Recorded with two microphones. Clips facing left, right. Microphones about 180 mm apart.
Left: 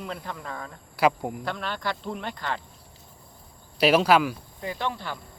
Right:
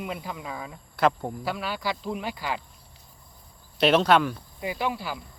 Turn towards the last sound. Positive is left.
turn(degrees=-10)  # may be behind; listen again after turning